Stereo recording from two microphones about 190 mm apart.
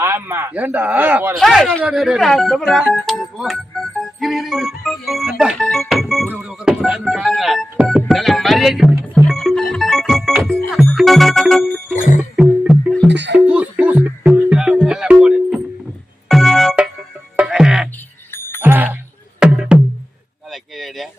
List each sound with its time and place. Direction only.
0.0 s speech: 10° right (ahead or behind)
1.4 s speech: centre (ahead or behind)
1.8 s music: 5° right (ahead or behind)
9.7 s organ: centre (ahead or behind)
10.7 s music: centre (ahead or behind)
11.9 s music: 40° left (ahead or behind)
13.1 s a sound: 65° right (ahead or behind)
13.4 s music: 5° right (ahead or behind)
20.5 s a sound: centre (ahead or behind)